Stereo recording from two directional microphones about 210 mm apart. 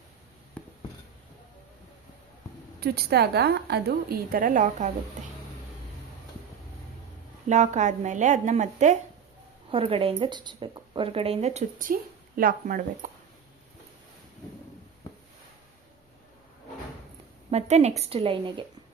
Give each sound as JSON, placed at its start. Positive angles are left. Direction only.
{"t": 0.6, "sound": "a sound", "side_deg": 5}
{"t": 2.8, "sound": "a woman's voice", "side_deg": -50}
{"t": 7.4, "sound": "a woman's voice", "side_deg": -35}
{"t": 17.5, "sound": "a woman's voice", "side_deg": -30}